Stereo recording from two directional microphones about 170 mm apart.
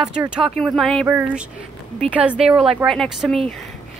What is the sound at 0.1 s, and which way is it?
Speech, 5° right (ahead or behind).